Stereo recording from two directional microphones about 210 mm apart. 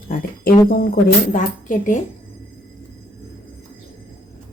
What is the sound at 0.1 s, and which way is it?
Speech, 40° left (ahead or behind).